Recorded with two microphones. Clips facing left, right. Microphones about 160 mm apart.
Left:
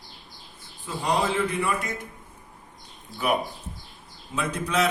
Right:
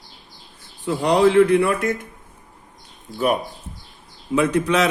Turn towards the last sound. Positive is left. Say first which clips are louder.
# right 8 dB
turn(degrees=-75)  # may be behind; listen again after turning